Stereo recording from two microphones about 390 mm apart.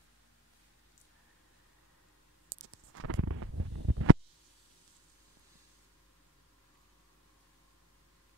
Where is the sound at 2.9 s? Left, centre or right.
Right.